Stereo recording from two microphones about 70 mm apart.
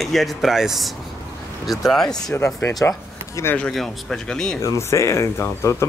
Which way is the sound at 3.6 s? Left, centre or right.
Centre.